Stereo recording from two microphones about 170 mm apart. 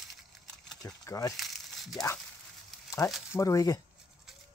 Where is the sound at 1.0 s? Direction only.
20° left (ahead or behind).